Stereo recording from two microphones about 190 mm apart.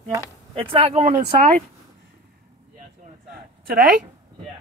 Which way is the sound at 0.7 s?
35° right (ahead or behind).